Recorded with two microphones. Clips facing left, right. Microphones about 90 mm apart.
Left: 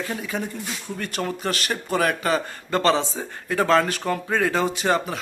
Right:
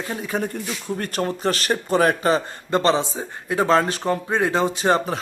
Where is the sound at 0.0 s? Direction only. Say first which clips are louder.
Right 2 dB; 30° right (ahead or behind).